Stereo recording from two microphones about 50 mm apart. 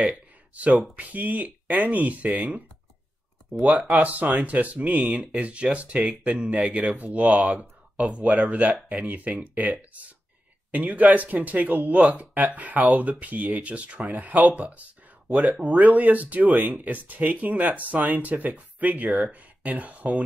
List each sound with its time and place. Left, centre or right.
0.0 s a sound: right
0.9 s speech: right
3.6 s speech: right